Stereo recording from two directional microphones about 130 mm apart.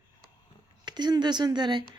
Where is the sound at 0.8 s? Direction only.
35° right (ahead or behind).